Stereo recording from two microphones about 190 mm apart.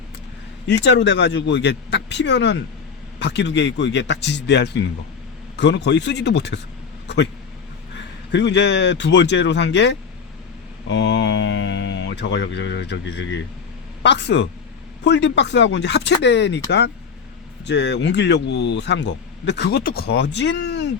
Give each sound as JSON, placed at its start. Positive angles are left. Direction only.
{"t": 0.7, "sound": "speech", "side_deg": 70}
{"t": 8.3, "sound": "speech", "side_deg": 65}
{"t": 17.7, "sound": "speech", "side_deg": 65}